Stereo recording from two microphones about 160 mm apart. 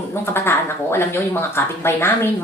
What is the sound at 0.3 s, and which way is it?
Speech, 15° left (ahead or behind).